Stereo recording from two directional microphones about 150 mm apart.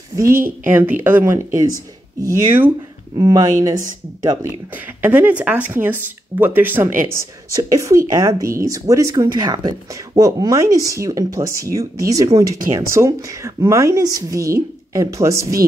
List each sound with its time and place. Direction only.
0.1 s a woman's voice: 20° right (ahead or behind)
4.7 s speech: 10° right (ahead or behind)